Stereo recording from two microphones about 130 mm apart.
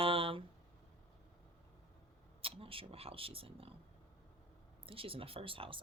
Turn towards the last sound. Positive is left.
turn(degrees=-45)  # may be behind; listen again after turning